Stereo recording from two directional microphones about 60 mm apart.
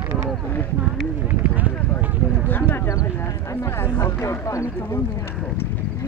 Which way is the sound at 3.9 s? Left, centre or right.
Left.